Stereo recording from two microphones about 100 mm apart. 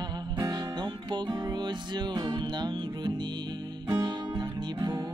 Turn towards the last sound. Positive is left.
turn(degrees=-30)  # may be behind; listen again after turning